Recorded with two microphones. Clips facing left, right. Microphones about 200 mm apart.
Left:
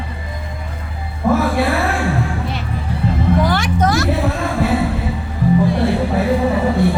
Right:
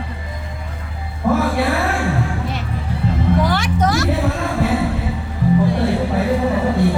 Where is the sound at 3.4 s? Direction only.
50° left (ahead or behind).